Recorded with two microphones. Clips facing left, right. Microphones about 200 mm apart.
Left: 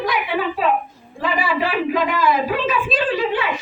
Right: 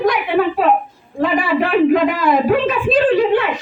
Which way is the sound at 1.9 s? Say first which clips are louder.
Right 5 dB; 50° right (ahead or behind).